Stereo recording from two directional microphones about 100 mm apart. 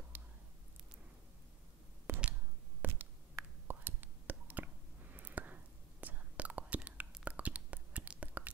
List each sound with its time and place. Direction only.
0.1 s whispering: 15° right (ahead or behind)
2.1 s a sound: 30° right (ahead or behind)
3.6 s whispering: 20° right (ahead or behind)